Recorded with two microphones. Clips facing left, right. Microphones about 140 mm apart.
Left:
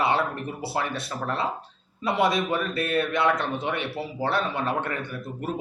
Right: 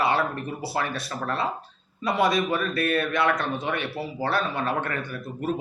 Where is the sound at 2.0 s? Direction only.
25° left (ahead or behind).